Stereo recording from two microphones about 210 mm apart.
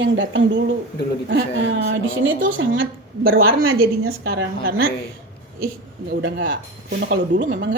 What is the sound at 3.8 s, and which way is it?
A woman's voice, 50° right (ahead or behind).